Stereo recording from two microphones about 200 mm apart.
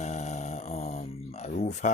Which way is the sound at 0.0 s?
35° left (ahead or behind).